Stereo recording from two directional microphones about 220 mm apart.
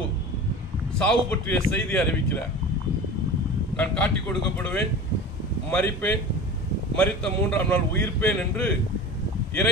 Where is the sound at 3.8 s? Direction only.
5° left (ahead or behind).